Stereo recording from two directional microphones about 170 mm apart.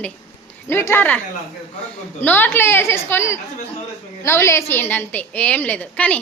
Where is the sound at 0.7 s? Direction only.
15° left (ahead or behind).